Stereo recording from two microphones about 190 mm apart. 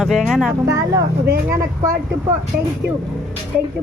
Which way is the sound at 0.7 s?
15° right (ahead or behind).